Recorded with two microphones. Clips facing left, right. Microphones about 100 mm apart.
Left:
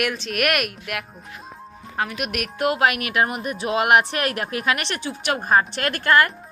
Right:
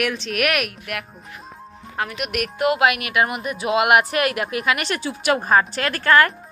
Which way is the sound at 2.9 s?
40° left (ahead or behind).